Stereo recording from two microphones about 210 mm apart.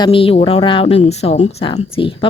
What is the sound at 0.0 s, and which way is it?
A woman's voice, 25° left (ahead or behind).